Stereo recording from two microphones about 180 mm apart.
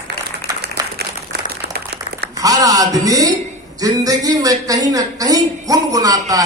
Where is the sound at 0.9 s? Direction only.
65° right (ahead or behind).